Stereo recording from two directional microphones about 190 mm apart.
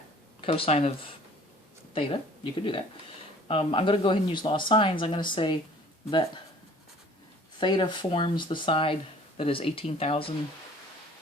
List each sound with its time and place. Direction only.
0.4 s speech: 30° left (ahead or behind)
7.6 s speech: 25° left (ahead or behind)